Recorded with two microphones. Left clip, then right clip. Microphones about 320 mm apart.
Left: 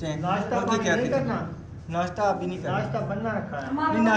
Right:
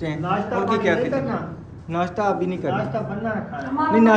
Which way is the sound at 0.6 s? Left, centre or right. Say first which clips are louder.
Right 5 dB; centre.